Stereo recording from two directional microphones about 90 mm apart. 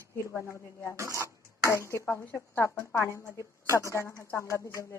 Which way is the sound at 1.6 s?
35° left (ahead or behind).